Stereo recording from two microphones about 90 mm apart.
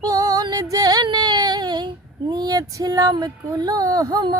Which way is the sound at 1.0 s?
50° right (ahead or behind).